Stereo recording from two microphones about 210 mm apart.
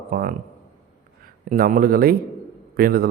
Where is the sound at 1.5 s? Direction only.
45° right (ahead or behind).